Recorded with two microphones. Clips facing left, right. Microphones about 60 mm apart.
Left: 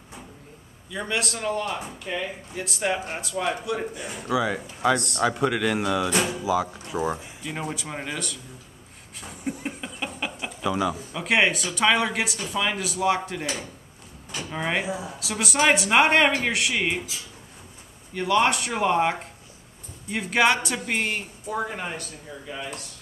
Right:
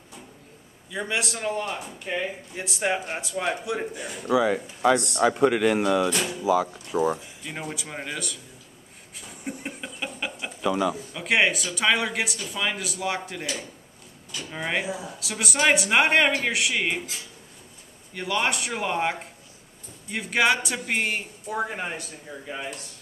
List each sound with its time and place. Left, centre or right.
0.9 s speech: centre
4.0 s speech: centre
4.3 s speech: centre
9.3 s a sound: centre
11.7 s speech: centre
14.5 s speech: centre
15.1 s speech: centre
18.1 s speech: centre